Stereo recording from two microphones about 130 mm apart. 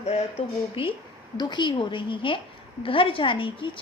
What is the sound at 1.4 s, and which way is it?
A woman's voice, 35° left (ahead or behind).